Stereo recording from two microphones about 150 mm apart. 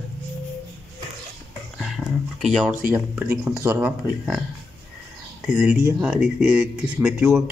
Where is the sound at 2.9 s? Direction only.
15° right (ahead or behind).